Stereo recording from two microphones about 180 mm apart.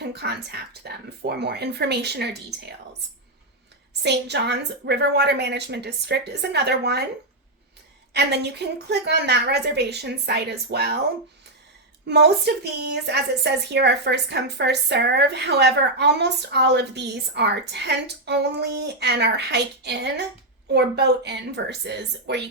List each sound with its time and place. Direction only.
0.0 s a woman's voice: 65° right (ahead or behind)
4.0 s a woman's voice: 70° right (ahead or behind)
8.1 s a woman's voice: 70° right (ahead or behind)
12.0 s a woman's voice: 70° right (ahead or behind)